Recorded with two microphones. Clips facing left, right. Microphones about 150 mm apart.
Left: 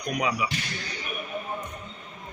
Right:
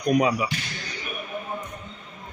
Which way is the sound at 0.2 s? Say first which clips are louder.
Right 6 dB; 40° right (ahead or behind).